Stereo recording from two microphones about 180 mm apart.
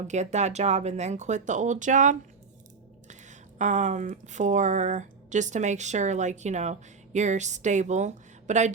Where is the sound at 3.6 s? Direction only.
40° right (ahead or behind).